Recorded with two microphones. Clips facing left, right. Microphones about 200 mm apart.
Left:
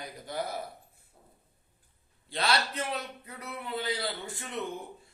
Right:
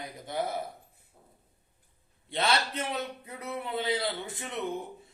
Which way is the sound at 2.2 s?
25° right (ahead or behind).